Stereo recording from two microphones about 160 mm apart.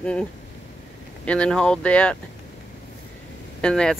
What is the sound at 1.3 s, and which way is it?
Speech, 5° left (ahead or behind).